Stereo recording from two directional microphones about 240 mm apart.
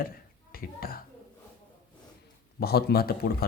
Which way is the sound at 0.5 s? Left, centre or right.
Left.